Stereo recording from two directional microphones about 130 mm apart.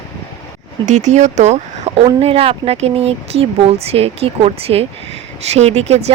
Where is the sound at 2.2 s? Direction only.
50° right (ahead or behind).